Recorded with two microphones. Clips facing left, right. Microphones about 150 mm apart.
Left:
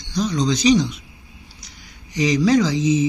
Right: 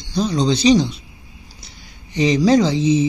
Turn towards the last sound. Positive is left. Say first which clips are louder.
# right 2 dB
turn(degrees=-30)  # may be behind; listen again after turning